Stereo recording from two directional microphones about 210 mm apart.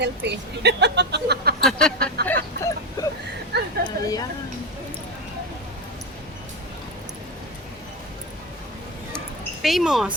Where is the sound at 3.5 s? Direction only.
50° right (ahead or behind).